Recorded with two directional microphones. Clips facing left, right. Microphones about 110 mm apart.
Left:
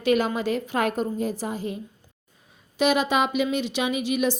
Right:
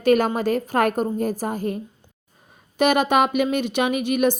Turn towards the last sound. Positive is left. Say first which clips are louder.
# right 4 dB
turn(degrees=-55)  # may be behind; listen again after turning